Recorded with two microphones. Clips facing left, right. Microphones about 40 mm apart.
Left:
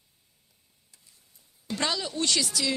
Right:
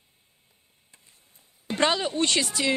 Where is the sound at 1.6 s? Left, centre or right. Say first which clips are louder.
Right 6 dB; right.